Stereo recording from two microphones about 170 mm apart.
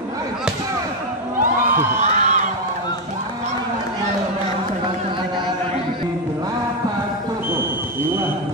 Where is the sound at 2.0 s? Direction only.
45° right (ahead or behind).